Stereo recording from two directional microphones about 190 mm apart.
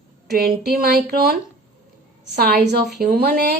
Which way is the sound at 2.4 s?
55° right (ahead or behind).